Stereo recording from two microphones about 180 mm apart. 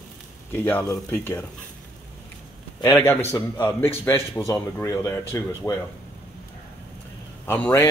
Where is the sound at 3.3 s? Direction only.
10° left (ahead or behind).